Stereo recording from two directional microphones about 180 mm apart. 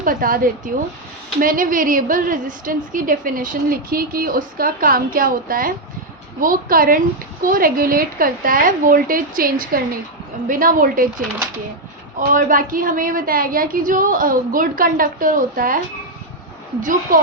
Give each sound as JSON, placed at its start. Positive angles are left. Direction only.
{"t": 0.0, "sound": "a woman's voice", "side_deg": -50}
{"t": 12.3, "sound": "a woman's voice", "side_deg": -50}
{"t": 16.8, "sound": "a woman's voice", "side_deg": -45}